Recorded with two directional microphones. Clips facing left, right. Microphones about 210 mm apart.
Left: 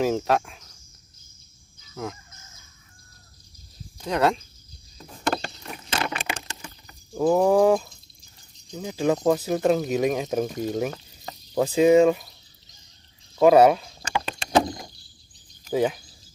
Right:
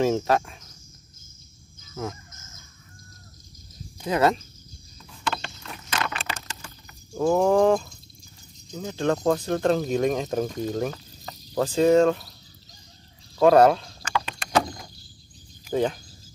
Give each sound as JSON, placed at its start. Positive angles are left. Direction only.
{"t": 0.0, "sound": "speech", "side_deg": 0}
{"t": 4.0, "sound": "a sound", "side_deg": 0}
{"t": 4.9, "sound": "vehicle", "side_deg": 40}
{"t": 5.6, "sound": "vehicle", "side_deg": 20}
{"t": 7.2, "sound": "a sound", "side_deg": 5}
{"t": 8.7, "sound": "speech", "side_deg": 5}
{"t": 13.4, "sound": "speech", "side_deg": 5}
{"t": 14.2, "sound": "vehicle", "side_deg": 30}
{"t": 15.7, "sound": "speech", "side_deg": 5}